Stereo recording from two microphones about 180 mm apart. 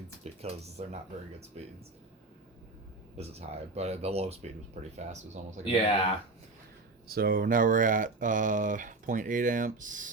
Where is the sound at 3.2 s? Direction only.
35° right (ahead or behind).